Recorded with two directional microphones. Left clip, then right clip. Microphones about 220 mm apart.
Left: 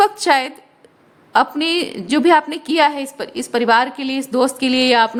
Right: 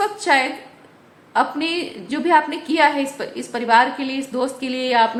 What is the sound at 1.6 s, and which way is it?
A woman's voice, 50° left (ahead or behind).